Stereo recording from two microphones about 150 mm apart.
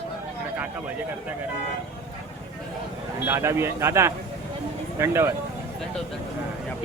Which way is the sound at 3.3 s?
15° right (ahead or behind).